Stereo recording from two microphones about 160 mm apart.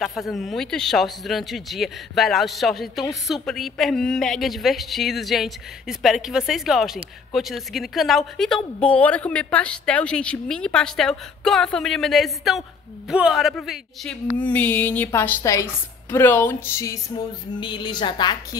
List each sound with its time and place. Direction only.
0.0 s speech: centre (ahead or behind); by 17.0 s 20° left (ahead or behind)
17.6 s a woman's voice: 30° left (ahead or behind)